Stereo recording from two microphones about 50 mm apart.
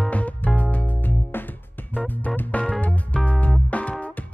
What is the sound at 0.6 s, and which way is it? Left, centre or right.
Music, left.